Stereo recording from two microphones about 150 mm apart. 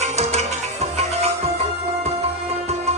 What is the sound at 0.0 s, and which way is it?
Music, 50° right (ahead or behind).